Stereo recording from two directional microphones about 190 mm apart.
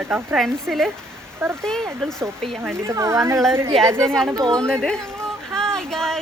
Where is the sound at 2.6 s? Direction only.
15° right (ahead or behind).